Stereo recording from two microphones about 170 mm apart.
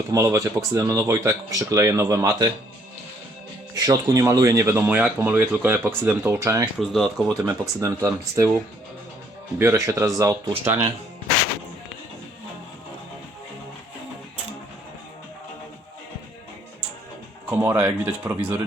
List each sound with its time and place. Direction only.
0.1 s speech: 20° right (ahead or behind)
3.8 s speech: 20° right (ahead or behind)
6.7 s speech: centre (ahead or behind)
7.4 s speech: 15° right (ahead or behind)
9.6 s speech: 15° right (ahead or behind)
17.5 s speech: 15° right (ahead or behind)